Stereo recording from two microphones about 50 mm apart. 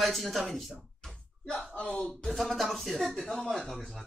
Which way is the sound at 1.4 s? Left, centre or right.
Left.